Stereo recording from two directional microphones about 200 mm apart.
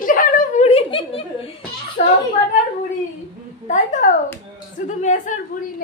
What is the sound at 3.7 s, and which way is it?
A child's voice, 40° left (ahead or behind).